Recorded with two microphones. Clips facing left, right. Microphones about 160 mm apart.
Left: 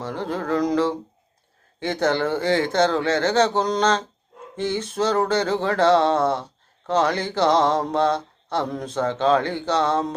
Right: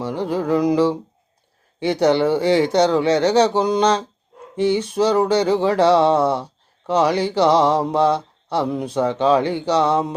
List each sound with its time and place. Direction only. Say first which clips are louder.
0.0 s music: right 5 dB; 15° right (ahead or behind)
1.8 s speech: right 5 dB; 15° right (ahead or behind)